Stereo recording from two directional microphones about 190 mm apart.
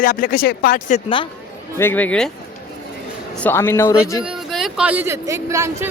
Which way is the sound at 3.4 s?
10° left (ahead or behind).